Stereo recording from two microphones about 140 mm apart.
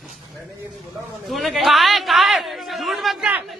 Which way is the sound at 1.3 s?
Centre (ahead or behind).